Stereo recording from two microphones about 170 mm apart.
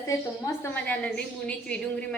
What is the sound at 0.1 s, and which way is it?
A woman's voice, 15° left (ahead or behind).